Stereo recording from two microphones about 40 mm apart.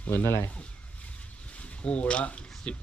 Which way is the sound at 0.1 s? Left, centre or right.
Left.